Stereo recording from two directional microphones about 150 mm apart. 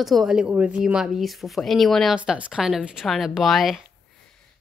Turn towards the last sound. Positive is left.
turn(degrees=0)  # may be behind; listen again after turning